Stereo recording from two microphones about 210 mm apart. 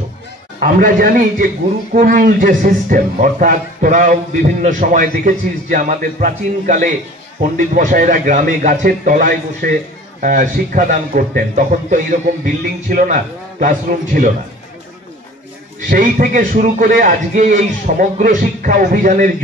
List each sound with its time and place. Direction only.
0.6 s speech: 45° right (ahead or behind)
15.9 s speech: 40° right (ahead or behind)